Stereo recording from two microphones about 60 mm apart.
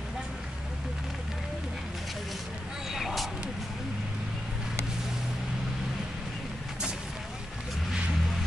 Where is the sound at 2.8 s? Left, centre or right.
Centre.